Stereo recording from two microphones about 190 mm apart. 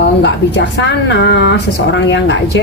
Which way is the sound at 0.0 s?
65° left (ahead or behind).